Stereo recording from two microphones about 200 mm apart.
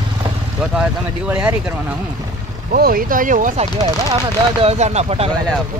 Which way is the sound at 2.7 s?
45° right (ahead or behind).